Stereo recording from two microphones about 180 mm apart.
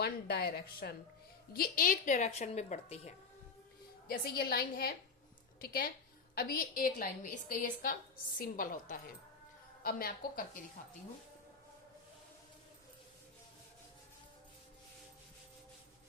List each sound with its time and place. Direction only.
0.0 s a woman's voice: 60° left (ahead or behind); by 3.1 s 35° left (ahead or behind)
4.1 s a woman's voice: 55° left (ahead or behind)